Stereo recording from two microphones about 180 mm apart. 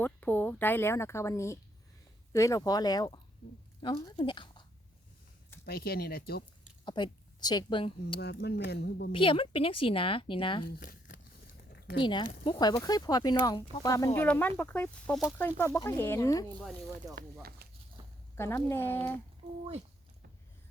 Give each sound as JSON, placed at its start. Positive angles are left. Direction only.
{"t": 0.0, "sound": "speech", "side_deg": 10}
{"t": 3.4, "sound": "speech", "side_deg": 70}
{"t": 3.8, "sound": "speech", "side_deg": 25}
{"t": 5.6, "sound": "speech", "side_deg": 60}
{"t": 6.8, "sound": "speech", "side_deg": 25}
{"t": 8.2, "sound": "speech", "side_deg": 65}
{"t": 9.1, "sound": "speech", "side_deg": 30}
{"t": 10.7, "sound": "crumpling", "side_deg": 50}
{"t": 11.7, "sound": "a sound", "side_deg": 65}
{"t": 11.9, "sound": "speech", "side_deg": 25}
{"t": 17.0, "sound": "speech", "side_deg": -20}
{"t": 18.0, "sound": "a sound", "side_deg": -25}
{"t": 18.3, "sound": "speech", "side_deg": 15}
{"t": 19.4, "sound": "speech", "side_deg": -35}